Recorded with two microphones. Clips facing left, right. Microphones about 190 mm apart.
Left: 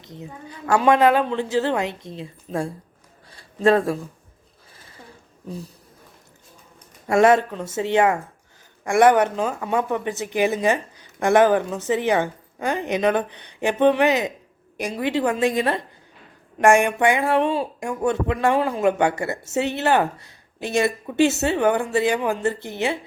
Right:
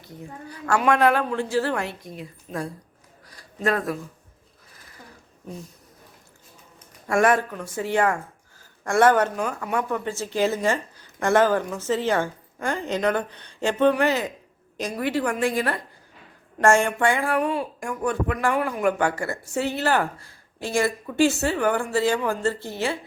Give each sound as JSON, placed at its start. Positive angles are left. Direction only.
{"t": 0.0, "sound": "speech", "side_deg": 20}
{"t": 5.5, "sound": "speech", "side_deg": 35}
{"t": 7.1, "sound": "speech", "side_deg": 25}